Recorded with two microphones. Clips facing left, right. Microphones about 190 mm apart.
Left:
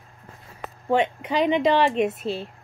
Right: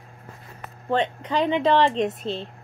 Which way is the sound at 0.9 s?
10° left (ahead or behind).